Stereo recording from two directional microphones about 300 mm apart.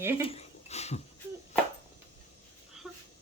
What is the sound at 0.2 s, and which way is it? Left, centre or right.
Speech, centre.